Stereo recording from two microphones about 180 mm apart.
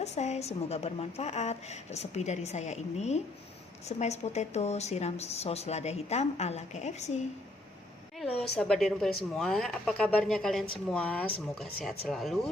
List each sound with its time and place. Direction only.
0.0 s a woman's voice: 40° left (ahead or behind)
8.2 s a woman's voice: centre (ahead or behind)